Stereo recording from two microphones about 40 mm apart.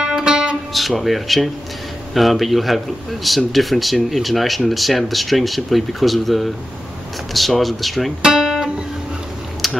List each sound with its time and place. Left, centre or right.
0.0 s music: centre
0.7 s speech: centre
8.3 s music: centre
9.6 s typing: centre